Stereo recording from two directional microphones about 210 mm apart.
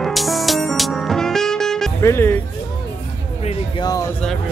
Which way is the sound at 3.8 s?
20° left (ahead or behind).